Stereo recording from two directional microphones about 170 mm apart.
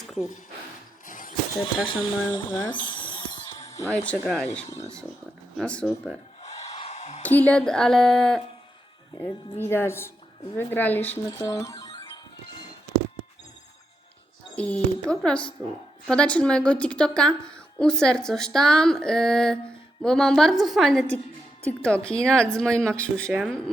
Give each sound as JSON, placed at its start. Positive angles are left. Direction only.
{"t": 0.1, "sound": "speech", "side_deg": 0}
{"t": 1.0, "sound": "mechanisms", "side_deg": 50}
{"t": 1.5, "sound": "speech", "side_deg": 30}
{"t": 2.7, "sound": "music", "side_deg": 30}
{"t": 3.9, "sound": "speech", "side_deg": 10}
{"t": 4.2, "sound": "speech", "side_deg": -5}
{"t": 5.5, "sound": "a woman's voice", "side_deg": 5}
{"t": 6.4, "sound": "a sound", "side_deg": 40}
{"t": 7.2, "sound": "a woman's voice", "side_deg": 10}
{"t": 9.6, "sound": "speech", "side_deg": 15}
{"t": 11.3, "sound": "music", "side_deg": 20}
{"t": 14.5, "sound": "a woman's voice", "side_deg": 5}